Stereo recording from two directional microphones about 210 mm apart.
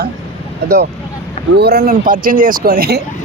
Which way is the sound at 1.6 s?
50° right (ahead or behind).